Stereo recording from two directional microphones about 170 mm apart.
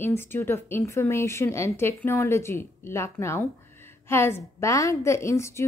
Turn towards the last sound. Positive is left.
turn(degrees=15)  # may be behind; listen again after turning